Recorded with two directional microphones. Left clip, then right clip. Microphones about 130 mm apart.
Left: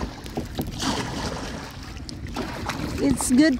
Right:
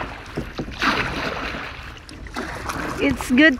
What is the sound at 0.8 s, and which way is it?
Boat, 75° left (ahead or behind).